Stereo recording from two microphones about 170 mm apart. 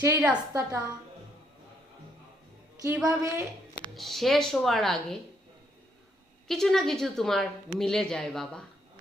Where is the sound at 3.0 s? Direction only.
15° right (ahead or behind).